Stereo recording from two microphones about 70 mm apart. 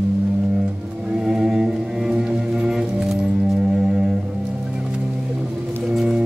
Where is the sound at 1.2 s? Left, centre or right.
Centre.